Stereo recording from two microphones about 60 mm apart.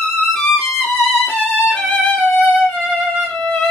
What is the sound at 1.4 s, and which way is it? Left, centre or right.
Violin, centre.